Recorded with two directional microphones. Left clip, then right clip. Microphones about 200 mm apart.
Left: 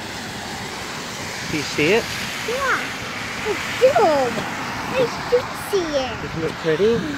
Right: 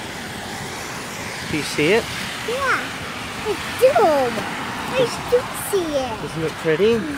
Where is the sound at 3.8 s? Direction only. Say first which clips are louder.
Right 1 dB; 50° right (ahead or behind).